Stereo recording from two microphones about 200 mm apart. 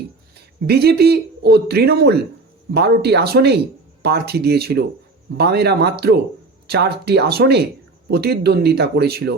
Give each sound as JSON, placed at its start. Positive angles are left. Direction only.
{"t": 0.3, "sound": "speech", "side_deg": -55}